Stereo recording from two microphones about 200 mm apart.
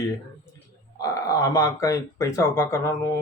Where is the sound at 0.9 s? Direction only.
15° left (ahead or behind).